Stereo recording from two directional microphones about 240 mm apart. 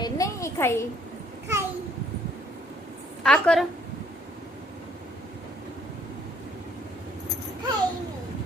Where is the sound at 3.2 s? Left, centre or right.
Centre.